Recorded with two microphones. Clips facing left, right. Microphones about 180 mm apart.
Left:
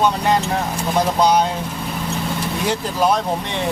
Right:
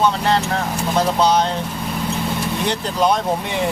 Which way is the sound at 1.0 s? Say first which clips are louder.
Left 1 dB; 10° left (ahead or behind).